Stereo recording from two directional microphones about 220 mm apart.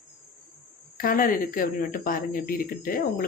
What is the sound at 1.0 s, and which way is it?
Speech, 40° left (ahead or behind).